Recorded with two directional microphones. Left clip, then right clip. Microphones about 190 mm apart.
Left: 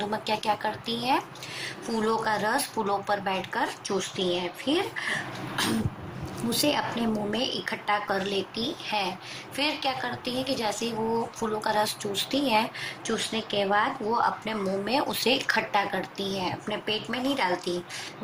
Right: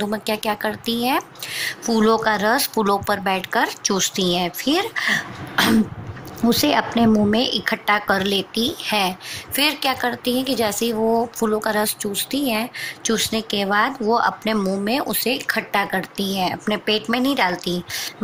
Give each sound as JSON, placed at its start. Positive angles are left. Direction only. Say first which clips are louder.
{"t": 0.0, "sound": "speech", "louder": "right 5 dB", "side_deg": -55}